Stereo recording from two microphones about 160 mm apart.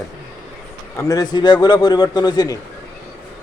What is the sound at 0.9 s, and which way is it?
A man's voice, 25° left (ahead or behind).